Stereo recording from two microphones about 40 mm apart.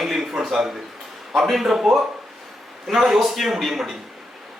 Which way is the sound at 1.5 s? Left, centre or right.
Centre.